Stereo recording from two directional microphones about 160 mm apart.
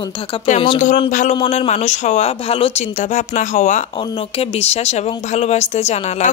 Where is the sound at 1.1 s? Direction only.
55° left (ahead or behind).